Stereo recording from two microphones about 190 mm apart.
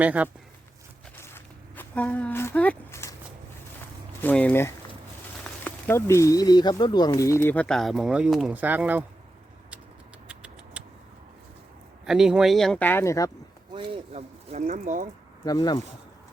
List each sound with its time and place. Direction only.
0.0 s speech: 5° right (ahead or behind)
1.2 s a sound: 10° left (ahead or behind)
4.2 s speech: 10° left (ahead or behind); by 9.0 s 10° right (ahead or behind)
10.2 s a sound: 5° right (ahead or behind)
12.0 s speech: centre (ahead or behind); by 13.3 s 15° left (ahead or behind)
13.7 s speech: 35° right (ahead or behind)
15.4 s speech: 20° left (ahead or behind)